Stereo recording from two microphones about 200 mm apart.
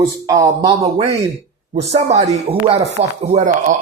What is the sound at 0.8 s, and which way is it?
Speech, 30° right (ahead or behind).